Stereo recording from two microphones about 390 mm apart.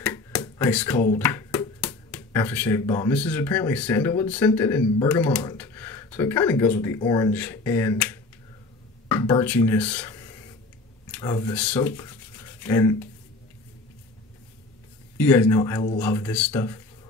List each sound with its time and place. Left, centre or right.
0.0 s a sound: centre
1.1 s speech: centre
15.1 s speech: centre